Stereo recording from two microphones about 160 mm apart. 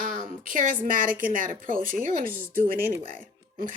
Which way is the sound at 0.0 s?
55° right (ahead or behind).